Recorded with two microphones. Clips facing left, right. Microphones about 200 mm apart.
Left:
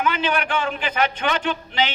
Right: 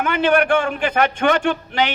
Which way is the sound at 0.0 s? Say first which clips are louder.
Right 6 dB; 55° right (ahead or behind).